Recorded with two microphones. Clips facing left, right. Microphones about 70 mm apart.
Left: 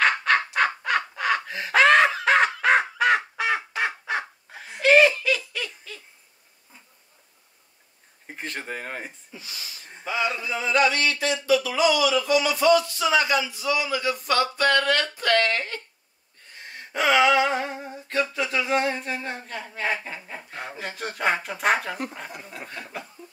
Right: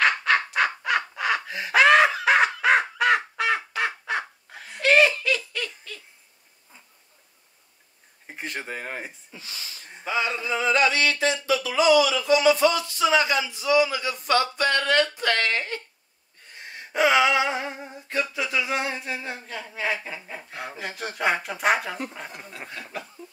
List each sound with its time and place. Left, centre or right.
0.0 s squawk: centre
0.6 s bird: centre
3.3 s goose: centre
4.6 s laughter: centre
8.4 s speech: centre
10.4 s speech: right
14.8 s a sound: right
17.1 s a sound: centre
22.7 s speech: centre